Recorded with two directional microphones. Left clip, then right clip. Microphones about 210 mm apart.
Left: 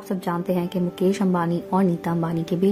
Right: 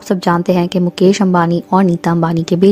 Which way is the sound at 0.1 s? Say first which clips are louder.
Right 12 dB; 45° right (ahead or behind).